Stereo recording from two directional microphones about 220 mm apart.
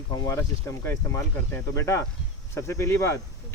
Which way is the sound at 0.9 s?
10° left (ahead or behind).